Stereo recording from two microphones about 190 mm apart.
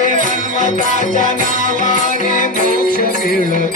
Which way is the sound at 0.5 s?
45° right (ahead or behind).